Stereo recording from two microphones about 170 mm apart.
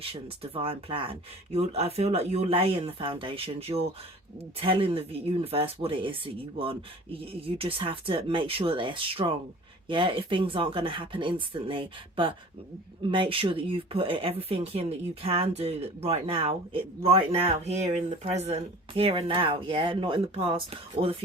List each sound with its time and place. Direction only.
0.0 s speech: 35° right (ahead or behind)